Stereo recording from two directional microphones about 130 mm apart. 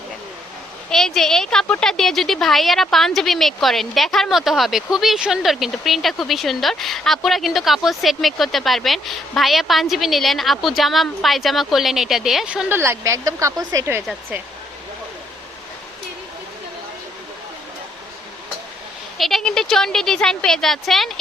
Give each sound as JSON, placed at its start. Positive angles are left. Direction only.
{"t": 0.9, "sound": "a woman's voice", "side_deg": 5}
{"t": 19.1, "sound": "a woman's voice", "side_deg": 0}